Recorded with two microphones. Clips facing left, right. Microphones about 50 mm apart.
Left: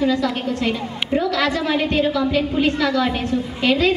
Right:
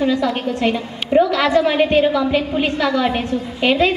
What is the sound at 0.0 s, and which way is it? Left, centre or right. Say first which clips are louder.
A woman's voice: right 2 dB; right.